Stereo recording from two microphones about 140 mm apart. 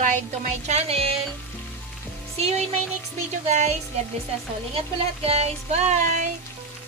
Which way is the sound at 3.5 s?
55° right (ahead or behind).